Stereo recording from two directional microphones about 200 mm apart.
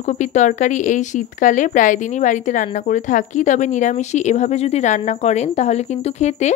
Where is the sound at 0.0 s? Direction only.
35° left (ahead or behind).